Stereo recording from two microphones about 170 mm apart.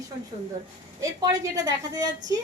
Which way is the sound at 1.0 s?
20° right (ahead or behind).